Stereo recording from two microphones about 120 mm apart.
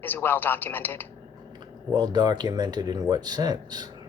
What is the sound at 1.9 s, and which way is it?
Speech, 35° right (ahead or behind).